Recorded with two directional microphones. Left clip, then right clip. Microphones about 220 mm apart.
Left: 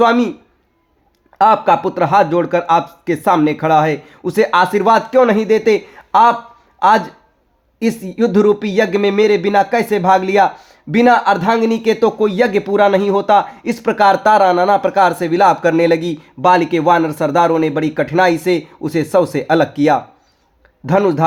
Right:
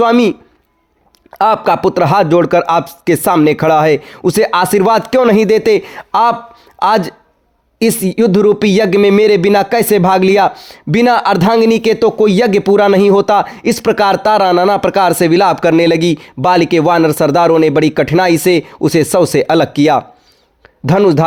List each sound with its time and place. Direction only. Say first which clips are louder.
0.0 s speech: right 3 dB; 45° right (ahead or behind)